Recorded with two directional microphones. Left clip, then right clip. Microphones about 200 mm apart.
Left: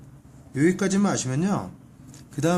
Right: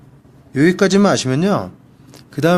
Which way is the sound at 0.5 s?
45° right (ahead or behind).